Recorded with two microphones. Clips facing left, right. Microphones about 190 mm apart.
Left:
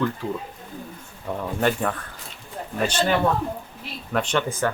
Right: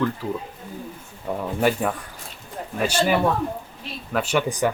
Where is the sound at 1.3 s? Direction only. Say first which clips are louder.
Right 2 dB; 10° right (ahead or behind).